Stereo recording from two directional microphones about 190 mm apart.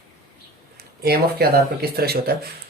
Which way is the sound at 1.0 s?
55° right (ahead or behind).